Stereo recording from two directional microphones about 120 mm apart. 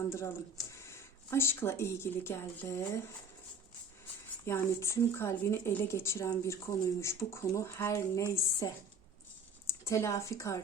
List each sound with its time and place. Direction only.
0.1 s speech: 25° left (ahead or behind)
4.4 s speech: 25° left (ahead or behind)
9.8 s speech: 25° left (ahead or behind)